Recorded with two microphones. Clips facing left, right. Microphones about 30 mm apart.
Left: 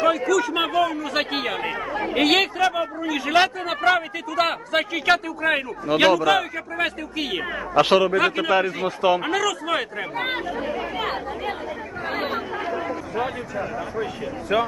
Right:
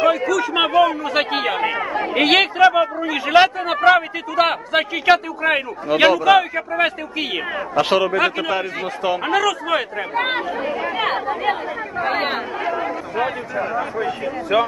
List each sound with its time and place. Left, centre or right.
0.0 s speech: centre
7.8 s a man's voice: centre
9.2 s speech: centre; by 12.4 s right
12.6 s speech: right
14.5 s speech: centre